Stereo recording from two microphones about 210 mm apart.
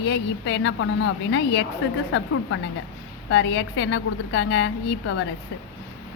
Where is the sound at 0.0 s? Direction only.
60° left (ahead or behind).